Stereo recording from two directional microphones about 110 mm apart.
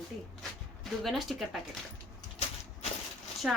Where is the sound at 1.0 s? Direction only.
Centre (ahead or behind).